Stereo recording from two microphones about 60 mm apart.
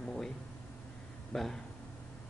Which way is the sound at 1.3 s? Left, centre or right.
Centre.